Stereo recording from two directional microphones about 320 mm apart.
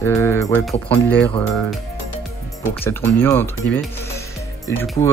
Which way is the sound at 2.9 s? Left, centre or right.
Centre.